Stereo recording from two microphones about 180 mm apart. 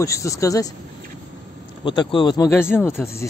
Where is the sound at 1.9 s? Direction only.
25° left (ahead or behind).